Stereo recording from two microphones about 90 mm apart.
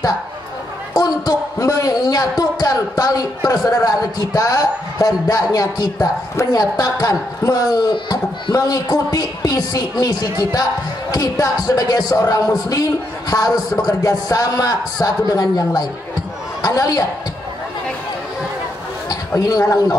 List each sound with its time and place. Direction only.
0.9 s speech: 40° left (ahead or behind)
11.1 s speech: 45° left (ahead or behind)
19.0 s speech: 40° left (ahead or behind)